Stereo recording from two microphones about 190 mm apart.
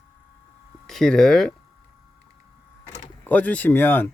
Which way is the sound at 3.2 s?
10° left (ahead or behind).